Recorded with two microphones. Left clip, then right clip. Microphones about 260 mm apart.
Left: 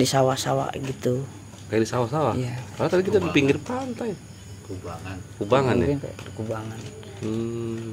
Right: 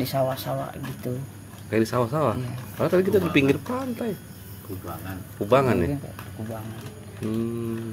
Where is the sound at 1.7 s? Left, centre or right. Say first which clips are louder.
Even; centre.